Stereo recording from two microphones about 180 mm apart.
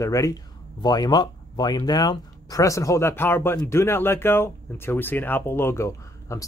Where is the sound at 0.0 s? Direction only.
20° left (ahead or behind).